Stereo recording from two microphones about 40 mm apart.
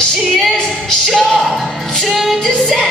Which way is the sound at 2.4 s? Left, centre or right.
Centre.